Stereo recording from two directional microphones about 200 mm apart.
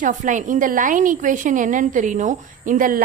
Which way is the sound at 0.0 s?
40° right (ahead or behind).